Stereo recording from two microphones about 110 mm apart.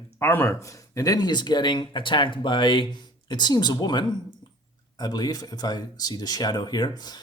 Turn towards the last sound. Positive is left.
turn(degrees=40)  # may be behind; listen again after turning